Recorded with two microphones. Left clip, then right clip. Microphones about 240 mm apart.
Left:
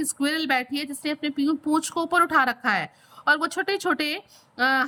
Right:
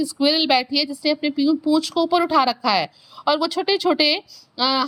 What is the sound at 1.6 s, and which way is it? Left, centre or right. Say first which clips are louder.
Speech: right 5 dB; centre.